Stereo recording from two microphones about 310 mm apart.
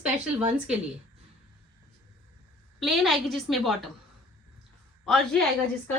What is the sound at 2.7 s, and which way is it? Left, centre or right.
Speech, centre.